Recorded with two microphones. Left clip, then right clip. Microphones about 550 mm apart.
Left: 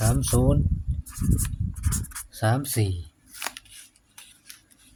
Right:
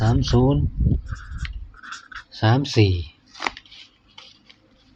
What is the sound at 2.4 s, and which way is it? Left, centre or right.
Speech, left.